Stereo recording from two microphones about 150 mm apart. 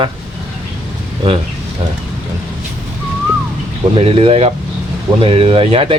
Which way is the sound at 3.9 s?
40° right (ahead or behind).